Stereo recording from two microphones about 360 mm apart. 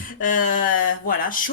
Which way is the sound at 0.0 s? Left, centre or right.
Left.